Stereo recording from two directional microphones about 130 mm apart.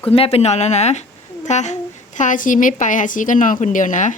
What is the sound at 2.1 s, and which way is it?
A woman's voice, 85° left.